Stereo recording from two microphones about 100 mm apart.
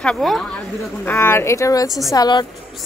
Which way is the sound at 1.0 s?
20° left (ahead or behind).